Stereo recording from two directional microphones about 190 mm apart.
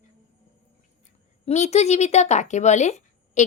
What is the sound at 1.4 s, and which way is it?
A child's voice, 35° left (ahead or behind).